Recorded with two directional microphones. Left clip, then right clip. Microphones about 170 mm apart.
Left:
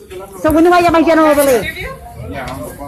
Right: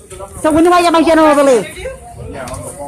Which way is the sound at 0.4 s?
10° right (ahead or behind).